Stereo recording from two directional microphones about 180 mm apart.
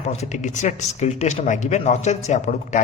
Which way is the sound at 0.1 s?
40° left (ahead or behind).